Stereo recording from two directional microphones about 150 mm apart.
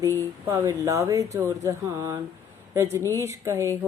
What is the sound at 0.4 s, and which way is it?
Speech, 20° right (ahead or behind).